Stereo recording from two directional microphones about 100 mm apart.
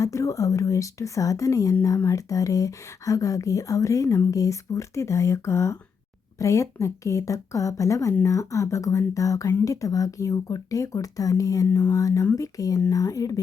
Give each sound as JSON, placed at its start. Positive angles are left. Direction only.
{"t": 0.0, "sound": "speech", "side_deg": 30}
{"t": 12.2, "sound": "speech", "side_deg": 25}
{"t": 12.5, "sound": "speech", "side_deg": 35}